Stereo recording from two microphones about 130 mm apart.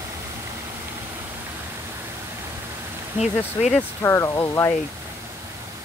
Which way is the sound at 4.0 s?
20° left (ahead or behind).